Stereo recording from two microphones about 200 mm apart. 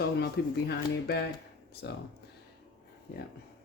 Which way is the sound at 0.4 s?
55° left (ahead or behind).